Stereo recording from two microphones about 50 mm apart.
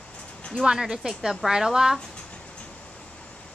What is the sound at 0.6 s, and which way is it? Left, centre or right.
A woman's voice, centre.